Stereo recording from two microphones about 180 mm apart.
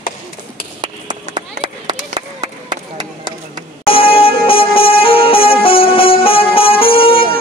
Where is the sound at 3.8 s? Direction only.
30° left (ahead or behind).